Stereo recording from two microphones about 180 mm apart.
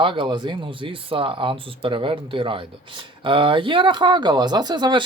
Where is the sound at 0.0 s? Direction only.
30° right (ahead or behind).